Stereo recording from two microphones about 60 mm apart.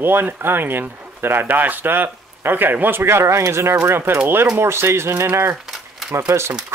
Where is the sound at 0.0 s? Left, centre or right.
Right.